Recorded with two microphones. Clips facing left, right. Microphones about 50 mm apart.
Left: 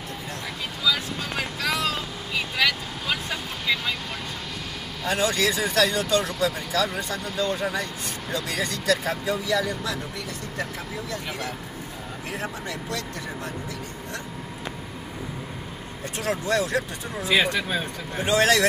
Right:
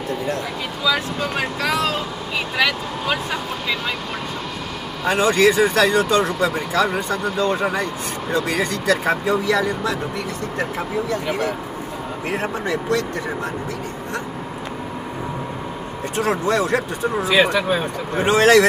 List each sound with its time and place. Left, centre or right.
2.3 s speech: right
5.0 s speech: right
11.2 s speech: right
16.2 s speech: right
17.3 s speech: centre
18.1 s speech: right